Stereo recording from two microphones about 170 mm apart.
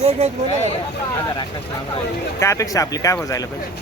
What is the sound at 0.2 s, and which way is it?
Speech, 35° right (ahead or behind).